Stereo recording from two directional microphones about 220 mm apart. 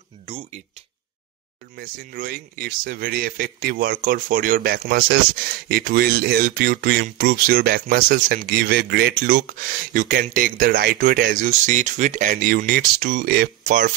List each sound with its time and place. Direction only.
0.3 s speech: 25° right (ahead or behind)
1.8 s speech: 40° right (ahead or behind)